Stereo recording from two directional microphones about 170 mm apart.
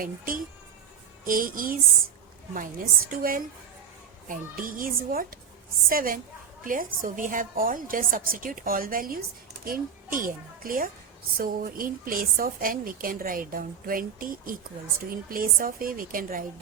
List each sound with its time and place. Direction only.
0.0 s a woman's voice: 55° right (ahead or behind)